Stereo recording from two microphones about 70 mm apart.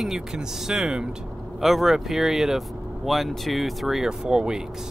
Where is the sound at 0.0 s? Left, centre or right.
Centre.